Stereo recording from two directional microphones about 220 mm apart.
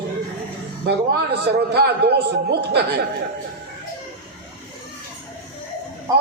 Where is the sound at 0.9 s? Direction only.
50° right (ahead or behind).